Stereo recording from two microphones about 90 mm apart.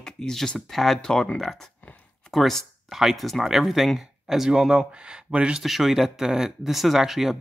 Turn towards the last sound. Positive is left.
turn(degrees=-5)  # may be behind; listen again after turning